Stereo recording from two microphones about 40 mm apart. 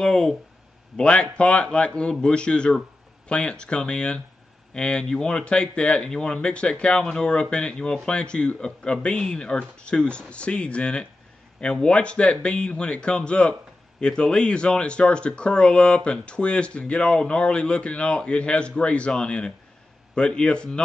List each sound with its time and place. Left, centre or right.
0.0 s speech: centre